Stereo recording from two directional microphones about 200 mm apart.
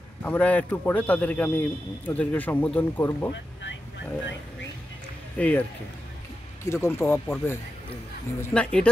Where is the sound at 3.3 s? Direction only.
65° left (ahead or behind).